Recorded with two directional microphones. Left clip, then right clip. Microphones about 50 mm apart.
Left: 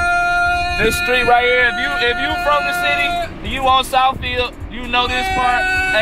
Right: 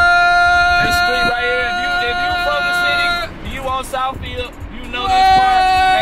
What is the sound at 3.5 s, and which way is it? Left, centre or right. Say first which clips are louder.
Music: left 7 dB; left.